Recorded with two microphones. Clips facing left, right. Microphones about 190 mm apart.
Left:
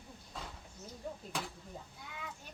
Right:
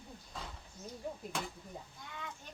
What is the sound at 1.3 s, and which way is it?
Speech, centre (ahead or behind).